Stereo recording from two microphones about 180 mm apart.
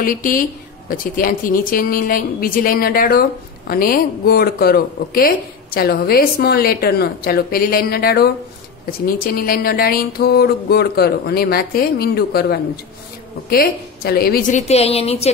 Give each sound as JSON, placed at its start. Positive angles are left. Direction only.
{"t": 0.0, "sound": "a woman's voice", "side_deg": 50}